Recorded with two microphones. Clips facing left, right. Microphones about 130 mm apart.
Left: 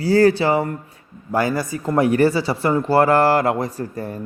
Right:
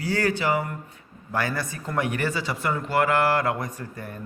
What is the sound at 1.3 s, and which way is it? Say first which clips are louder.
Speech: left 7 dB; 25° left (ahead or behind).